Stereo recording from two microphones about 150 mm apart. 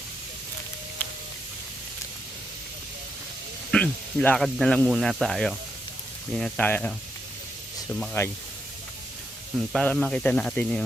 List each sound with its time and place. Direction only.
3.7 s speech: 10° left (ahead or behind)
6.4 s speech: 10° left (ahead or behind)
8.2 s speech: 20° left (ahead or behind)
9.7 s speech: 5° left (ahead or behind)